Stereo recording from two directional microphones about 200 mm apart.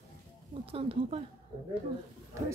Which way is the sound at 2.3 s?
15° right (ahead or behind).